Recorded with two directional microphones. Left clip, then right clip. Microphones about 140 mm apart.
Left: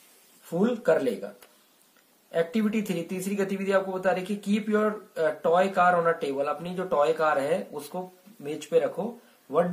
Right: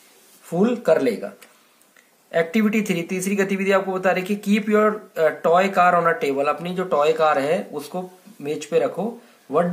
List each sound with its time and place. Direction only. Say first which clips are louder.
0.5 s speech: right 5 dB; 10° right (ahead or behind)
2.3 s speech: right 6 dB; 5° right (ahead or behind)
9.5 s speech: right 4 dB; 25° right (ahead or behind)